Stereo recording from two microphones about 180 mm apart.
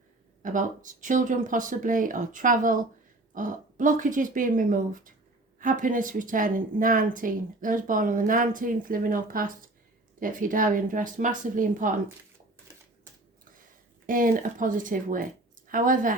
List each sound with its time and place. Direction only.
0.4 s speech: 45° right (ahead or behind)
14.1 s speech: 50° right (ahead or behind)